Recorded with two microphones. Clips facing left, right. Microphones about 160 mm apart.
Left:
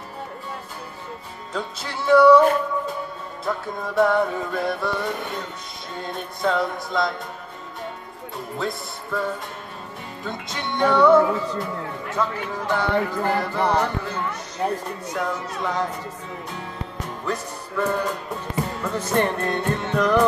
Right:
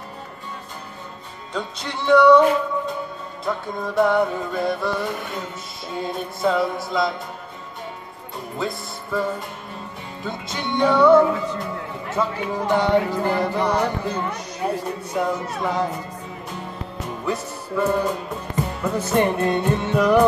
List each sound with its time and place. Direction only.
1.5 s music: 5° left (ahead or behind)
3.4 s music: centre (ahead or behind)
8.5 s speech: centre (ahead or behind)
10.2 s music: centre (ahead or behind)
12.2 s music: 15° right (ahead or behind)
17.2 s music: 5° right (ahead or behind)